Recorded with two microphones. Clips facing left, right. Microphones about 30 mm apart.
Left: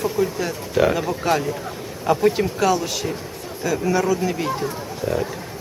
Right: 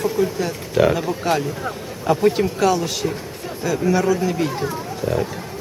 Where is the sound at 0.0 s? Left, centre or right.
Centre.